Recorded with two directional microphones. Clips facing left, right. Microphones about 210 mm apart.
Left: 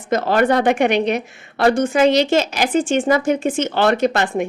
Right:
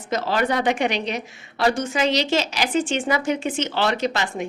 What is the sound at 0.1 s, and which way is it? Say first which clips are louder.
A woman's voice: left 6 dB; 55° left (ahead or behind).